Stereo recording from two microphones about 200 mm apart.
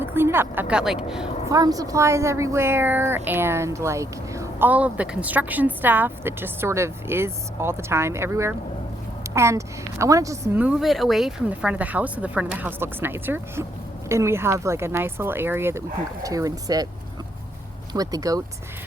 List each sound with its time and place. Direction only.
0.0 s speech: 10° right (ahead or behind)
1.5 s a woman's voice: 20° right (ahead or behind)
17.9 s a woman's voice: 20° right (ahead or behind)